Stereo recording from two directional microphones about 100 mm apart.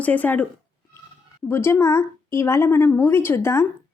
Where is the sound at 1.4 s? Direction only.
25° left (ahead or behind).